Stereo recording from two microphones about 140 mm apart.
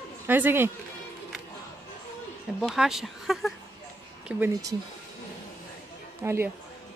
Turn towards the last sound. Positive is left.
turn(degrees=-20)  # may be behind; listen again after turning